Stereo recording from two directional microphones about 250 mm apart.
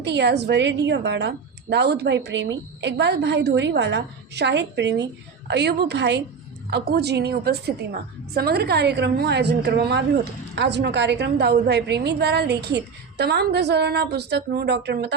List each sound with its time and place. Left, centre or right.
0.0 s a woman's voice: right